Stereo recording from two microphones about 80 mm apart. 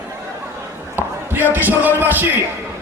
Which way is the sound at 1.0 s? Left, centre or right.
Right.